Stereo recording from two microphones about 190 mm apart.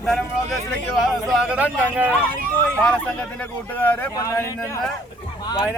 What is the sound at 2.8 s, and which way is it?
Speech, 5° left (ahead or behind).